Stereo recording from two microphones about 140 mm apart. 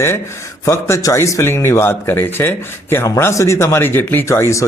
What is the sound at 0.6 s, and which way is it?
Speech, 20° left (ahead or behind).